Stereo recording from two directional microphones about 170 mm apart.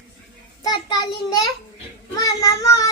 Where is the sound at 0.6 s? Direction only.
25° left (ahead or behind).